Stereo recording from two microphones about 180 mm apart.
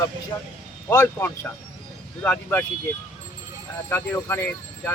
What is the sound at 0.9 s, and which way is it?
Speech, 10° left (ahead or behind).